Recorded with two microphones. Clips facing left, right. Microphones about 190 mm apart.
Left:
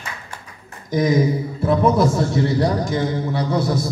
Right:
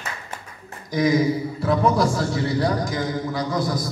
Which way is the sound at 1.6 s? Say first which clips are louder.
Left 4 dB; 25° left (ahead or behind).